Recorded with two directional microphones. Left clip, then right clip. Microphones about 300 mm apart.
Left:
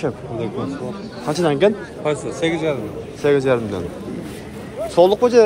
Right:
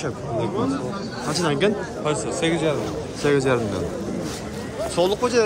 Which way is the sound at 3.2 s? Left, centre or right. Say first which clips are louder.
Left 4 dB; centre.